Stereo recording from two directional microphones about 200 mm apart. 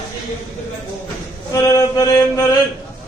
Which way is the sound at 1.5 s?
15° left (ahead or behind).